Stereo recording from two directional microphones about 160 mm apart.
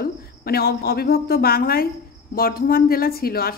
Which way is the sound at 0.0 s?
70° left (ahead or behind).